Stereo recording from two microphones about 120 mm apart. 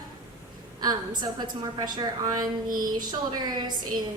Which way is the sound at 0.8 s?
35° right (ahead or behind).